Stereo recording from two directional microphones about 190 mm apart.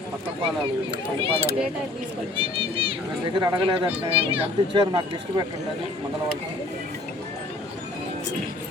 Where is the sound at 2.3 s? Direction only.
30° right (ahead or behind).